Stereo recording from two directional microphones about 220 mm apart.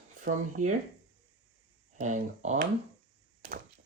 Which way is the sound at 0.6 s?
90° right.